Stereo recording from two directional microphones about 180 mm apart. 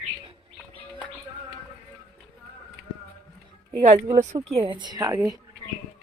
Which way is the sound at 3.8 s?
40° right (ahead or behind).